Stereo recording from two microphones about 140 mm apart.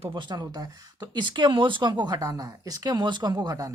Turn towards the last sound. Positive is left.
turn(degrees=-30)  # may be behind; listen again after turning